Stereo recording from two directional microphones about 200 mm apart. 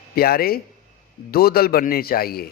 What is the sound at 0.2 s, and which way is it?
Speech, 50° left (ahead or behind).